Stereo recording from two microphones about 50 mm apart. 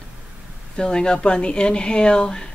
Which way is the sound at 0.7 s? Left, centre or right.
Centre.